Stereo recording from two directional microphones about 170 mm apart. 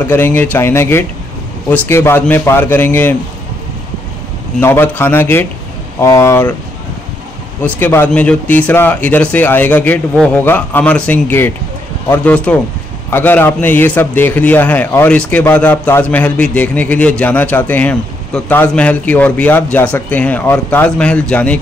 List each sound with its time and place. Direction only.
0.0 s a man's voice: 10° left (ahead or behind)
4.6 s a man's voice: 10° left (ahead or behind)
7.6 s a man's voice: 15° left (ahead or behind)